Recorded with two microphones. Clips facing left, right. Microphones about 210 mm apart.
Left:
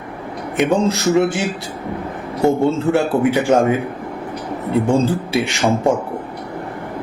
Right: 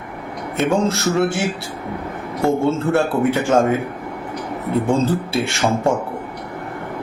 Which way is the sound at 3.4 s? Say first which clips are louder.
Left 1 dB; 15° left (ahead or behind).